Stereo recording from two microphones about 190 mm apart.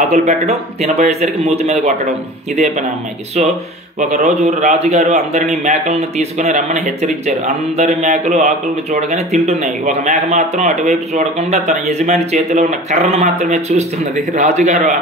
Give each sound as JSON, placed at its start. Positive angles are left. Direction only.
{"t": 0.0, "sound": "speech", "side_deg": -35}
{"t": 4.0, "sound": "speech", "side_deg": -40}